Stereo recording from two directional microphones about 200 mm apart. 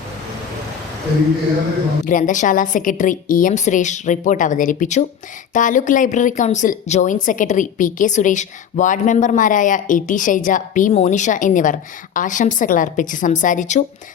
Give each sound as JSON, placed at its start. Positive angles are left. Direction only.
{"t": 2.0, "sound": "speech", "side_deg": 40}